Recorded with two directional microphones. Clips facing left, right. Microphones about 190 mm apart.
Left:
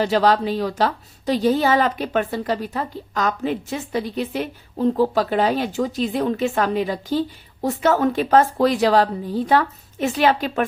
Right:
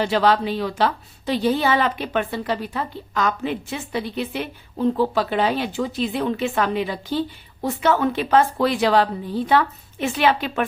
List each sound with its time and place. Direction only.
0.0 s a woman's voice: 40° left (ahead or behind)